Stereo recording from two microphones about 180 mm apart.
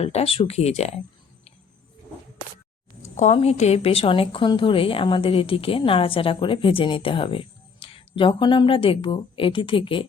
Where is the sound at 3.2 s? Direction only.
35° left (ahead or behind).